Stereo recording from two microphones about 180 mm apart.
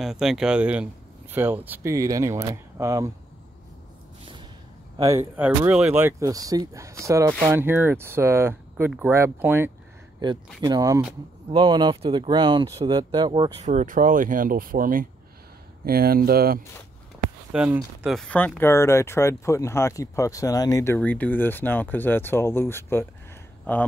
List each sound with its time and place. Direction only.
0.0 s speech: centre (ahead or behind); by 3.1 s 15° right (ahead or behind)
4.9 s speech: 15° right (ahead or behind)
13.7 s speech: 45° right (ahead or behind)
17.5 s speech: 5° right (ahead or behind); by 23.9 s 10° left (ahead or behind)